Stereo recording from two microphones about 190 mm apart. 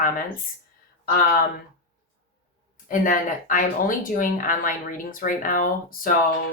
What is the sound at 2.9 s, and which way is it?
Speech, 45° left (ahead or behind).